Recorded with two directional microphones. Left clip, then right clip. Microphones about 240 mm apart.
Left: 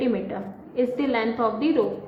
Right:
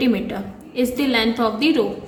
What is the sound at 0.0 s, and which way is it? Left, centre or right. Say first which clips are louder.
A woman's voice: right 4 dB; right.